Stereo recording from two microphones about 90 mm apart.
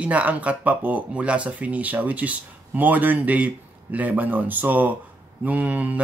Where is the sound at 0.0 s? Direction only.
15° right (ahead or behind).